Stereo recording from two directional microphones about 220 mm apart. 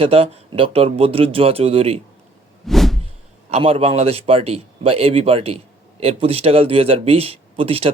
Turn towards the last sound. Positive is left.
turn(degrees=-25)  # may be behind; listen again after turning